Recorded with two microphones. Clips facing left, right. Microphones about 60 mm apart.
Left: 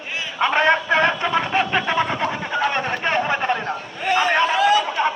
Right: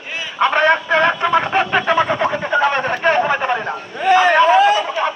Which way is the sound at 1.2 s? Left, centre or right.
Centre.